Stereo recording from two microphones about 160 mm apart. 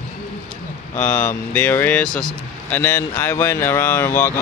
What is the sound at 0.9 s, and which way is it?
Speech, 10° left (ahead or behind).